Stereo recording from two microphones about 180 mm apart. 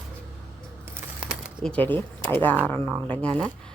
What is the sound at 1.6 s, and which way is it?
Speech, 10° left (ahead or behind).